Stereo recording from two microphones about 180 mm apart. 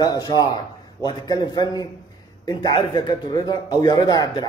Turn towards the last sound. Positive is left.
turn(degrees=20)  # may be behind; listen again after turning